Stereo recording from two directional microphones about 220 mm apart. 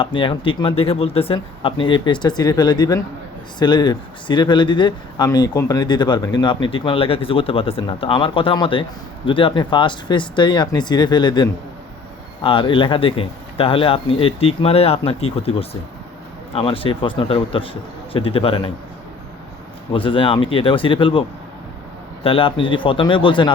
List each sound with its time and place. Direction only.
0.0 s speech: 20° left (ahead or behind)
19.9 s speech: 25° left (ahead or behind)